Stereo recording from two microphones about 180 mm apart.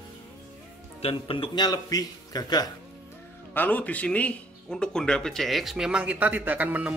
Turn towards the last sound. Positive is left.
turn(degrees=-10)  # may be behind; listen again after turning